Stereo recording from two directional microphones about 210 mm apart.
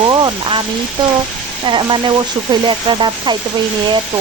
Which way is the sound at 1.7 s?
20° right (ahead or behind).